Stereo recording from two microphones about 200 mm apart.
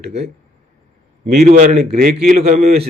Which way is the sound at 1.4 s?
40° right (ahead or behind).